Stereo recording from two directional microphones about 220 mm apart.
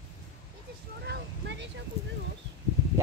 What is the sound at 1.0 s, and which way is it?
Speech, 50° right (ahead or behind).